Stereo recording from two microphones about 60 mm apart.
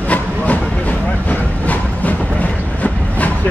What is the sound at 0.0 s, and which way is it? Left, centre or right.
Train, left.